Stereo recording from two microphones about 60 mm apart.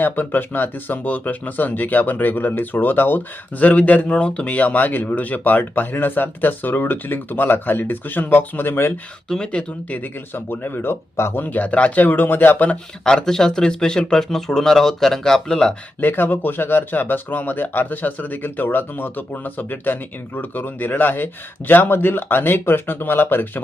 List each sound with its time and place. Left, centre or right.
0.0 s speech: left
9.3 s speech: centre
9.9 s speech: left
11.4 s speech: left
13.1 s speech: centre
16.0 s speech: left